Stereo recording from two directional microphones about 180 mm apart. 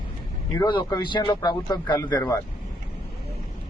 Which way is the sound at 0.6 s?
25° left (ahead or behind).